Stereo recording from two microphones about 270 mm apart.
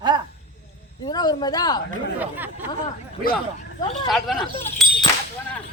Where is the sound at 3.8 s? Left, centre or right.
Centre.